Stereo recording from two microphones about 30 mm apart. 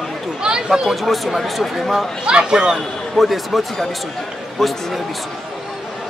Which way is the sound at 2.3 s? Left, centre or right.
Right.